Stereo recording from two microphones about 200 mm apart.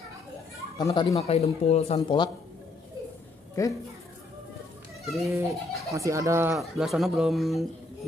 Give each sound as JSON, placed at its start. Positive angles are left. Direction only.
{"t": 0.7, "sound": "speech", "side_deg": 20}
{"t": 1.1, "sound": "speech", "side_deg": 30}
{"t": 3.6, "sound": "speech", "side_deg": 15}
{"t": 5.0, "sound": "a child's voice", "side_deg": 0}
{"t": 5.3, "sound": "speech", "side_deg": -15}
{"t": 6.5, "sound": "speech", "side_deg": 0}